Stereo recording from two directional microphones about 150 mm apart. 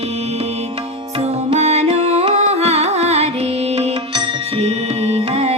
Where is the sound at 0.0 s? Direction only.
45° right (ahead or behind).